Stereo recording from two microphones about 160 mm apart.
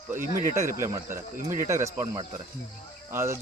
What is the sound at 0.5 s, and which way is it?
Speech, 15° right (ahead or behind).